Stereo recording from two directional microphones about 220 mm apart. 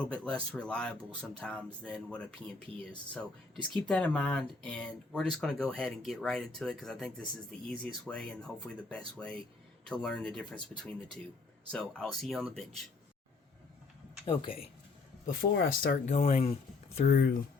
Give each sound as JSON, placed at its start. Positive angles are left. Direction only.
{"t": 0.3, "sound": "speech", "side_deg": 5}
{"t": 15.4, "sound": "speech", "side_deg": 45}
{"t": 17.0, "sound": "speech", "side_deg": 40}